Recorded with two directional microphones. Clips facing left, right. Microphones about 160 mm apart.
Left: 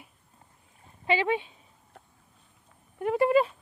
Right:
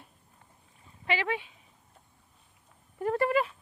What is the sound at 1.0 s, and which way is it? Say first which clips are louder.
Speech: left 5 dB; 25° left (ahead or behind).